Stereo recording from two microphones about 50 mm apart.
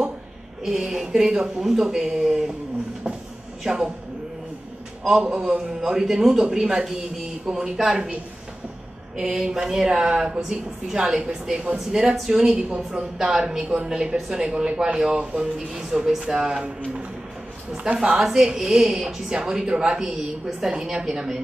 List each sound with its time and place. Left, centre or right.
0.7 s a woman's voice: centre
3.6 s a woman's voice: centre
5.0 s a woman's voice: centre
9.1 s a woman's voice: centre